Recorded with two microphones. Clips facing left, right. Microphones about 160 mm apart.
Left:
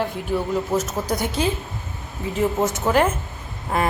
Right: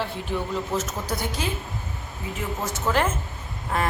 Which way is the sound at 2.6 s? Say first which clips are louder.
Left 3 dB; 15° left (ahead or behind).